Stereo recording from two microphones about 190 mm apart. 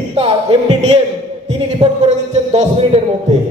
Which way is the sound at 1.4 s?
35° right (ahead or behind).